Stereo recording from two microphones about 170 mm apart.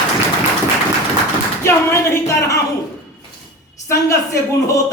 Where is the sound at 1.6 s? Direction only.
15° left (ahead or behind).